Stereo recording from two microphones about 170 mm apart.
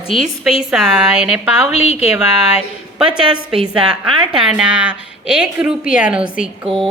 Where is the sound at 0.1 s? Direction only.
Centre (ahead or behind).